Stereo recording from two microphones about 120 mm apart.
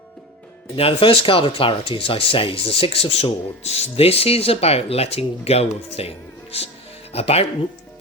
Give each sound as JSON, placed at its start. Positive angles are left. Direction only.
{"t": 0.8, "sound": "speech", "side_deg": 50}